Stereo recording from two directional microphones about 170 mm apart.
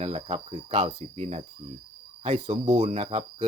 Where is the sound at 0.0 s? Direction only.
35° right (ahead or behind).